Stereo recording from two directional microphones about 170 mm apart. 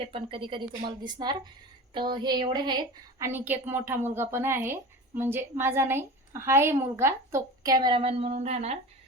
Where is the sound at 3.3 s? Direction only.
10° right (ahead or behind).